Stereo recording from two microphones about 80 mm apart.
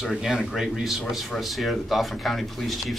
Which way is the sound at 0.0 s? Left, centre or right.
Centre.